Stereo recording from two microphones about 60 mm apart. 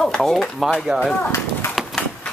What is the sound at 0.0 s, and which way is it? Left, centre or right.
Speech, centre.